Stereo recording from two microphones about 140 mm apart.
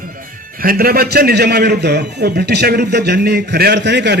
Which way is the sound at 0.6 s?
90° right.